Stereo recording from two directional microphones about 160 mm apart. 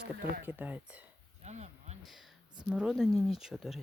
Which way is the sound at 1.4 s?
45° right (ahead or behind).